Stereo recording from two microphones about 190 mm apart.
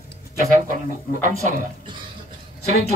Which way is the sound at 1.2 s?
40° right (ahead or behind).